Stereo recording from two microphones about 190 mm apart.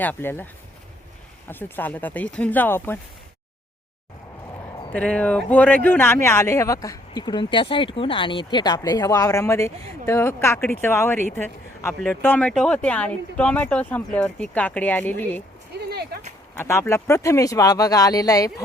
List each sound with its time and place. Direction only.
0.0 s speech: 10° left (ahead or behind)
1.5 s speech: 10° left (ahead or behind)
4.9 s speech: 5° left (ahead or behind)
16.6 s speech: 15° left (ahead or behind)